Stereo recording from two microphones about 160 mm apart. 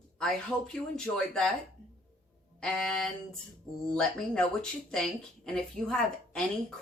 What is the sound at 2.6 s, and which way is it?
Speech, 5° left (ahead or behind).